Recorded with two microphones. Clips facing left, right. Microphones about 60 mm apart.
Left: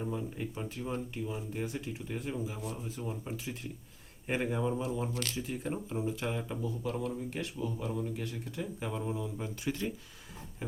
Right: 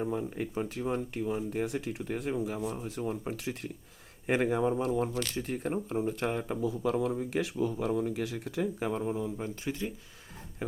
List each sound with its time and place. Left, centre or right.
0.0 s speech: right
1.6 s speech: right
4.3 s speech: right
6.6 s speech: right
8.9 s speech: right
9.6 s speech: centre
10.6 s a sound: right